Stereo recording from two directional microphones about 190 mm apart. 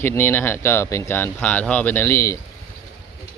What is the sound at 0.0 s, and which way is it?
A man's voice, 10° left (ahead or behind).